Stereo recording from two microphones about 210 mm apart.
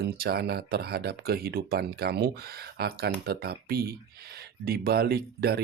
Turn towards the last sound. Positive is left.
turn(degrees=-50)  # may be behind; listen again after turning